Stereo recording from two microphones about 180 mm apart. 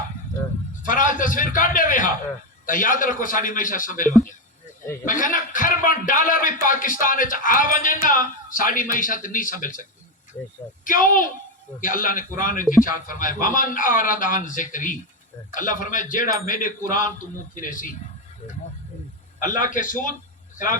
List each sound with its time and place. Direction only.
0.8 s a man's voice: 50° left (ahead or behind)
10.8 s a man's voice: 50° left (ahead or behind)
19.4 s a man's voice: 50° left (ahead or behind)